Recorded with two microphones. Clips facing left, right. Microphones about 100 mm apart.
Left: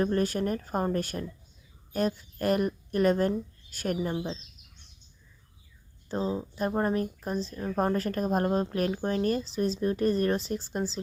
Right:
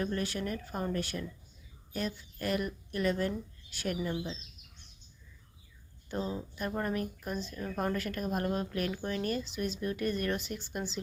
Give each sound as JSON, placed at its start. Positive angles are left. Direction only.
{"t": 0.0, "sound": "speech", "side_deg": 40}
{"t": 6.1, "sound": "speech", "side_deg": 30}